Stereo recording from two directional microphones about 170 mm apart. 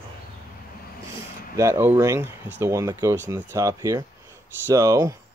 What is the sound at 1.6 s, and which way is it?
Speech, 15° right (ahead or behind).